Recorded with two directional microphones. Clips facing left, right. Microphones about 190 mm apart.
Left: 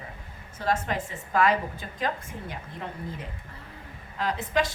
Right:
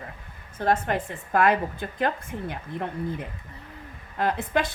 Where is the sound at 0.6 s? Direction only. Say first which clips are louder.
Right 4 dB; 55° right (ahead or behind).